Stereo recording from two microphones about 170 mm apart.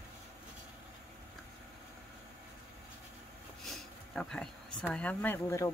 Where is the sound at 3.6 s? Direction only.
Centre (ahead or behind).